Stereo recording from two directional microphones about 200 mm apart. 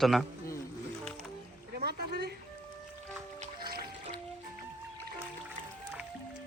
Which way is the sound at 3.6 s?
50° right (ahead or behind).